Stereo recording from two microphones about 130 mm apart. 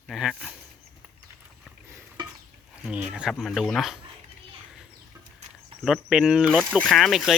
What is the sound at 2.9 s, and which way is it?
Speech, 10° right (ahead or behind).